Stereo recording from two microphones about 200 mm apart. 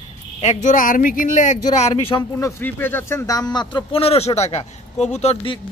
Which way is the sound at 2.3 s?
10° left (ahead or behind).